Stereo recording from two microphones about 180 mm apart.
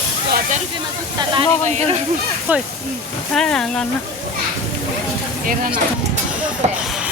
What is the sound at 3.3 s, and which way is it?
Speech, 5° left (ahead or behind).